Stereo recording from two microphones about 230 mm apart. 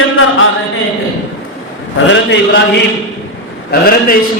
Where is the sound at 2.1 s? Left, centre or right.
Left.